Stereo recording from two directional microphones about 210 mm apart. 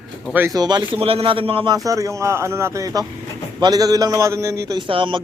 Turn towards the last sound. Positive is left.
turn(degrees=-25)  # may be behind; listen again after turning